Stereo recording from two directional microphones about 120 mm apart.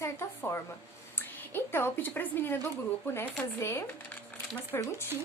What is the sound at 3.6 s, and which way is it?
A woman's voice, 20° left (ahead or behind).